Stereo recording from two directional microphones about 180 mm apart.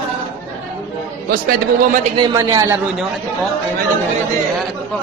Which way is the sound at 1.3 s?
50° right (ahead or behind).